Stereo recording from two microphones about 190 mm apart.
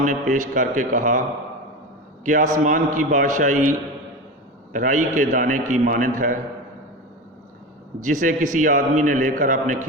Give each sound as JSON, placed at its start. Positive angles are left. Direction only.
{"t": 0.0, "sound": "a man's voice", "side_deg": -45}
{"t": 2.2, "sound": "a man's voice", "side_deg": -45}
{"t": 4.7, "sound": "a man's voice", "side_deg": -45}
{"t": 8.0, "sound": "a man's voice", "side_deg": -45}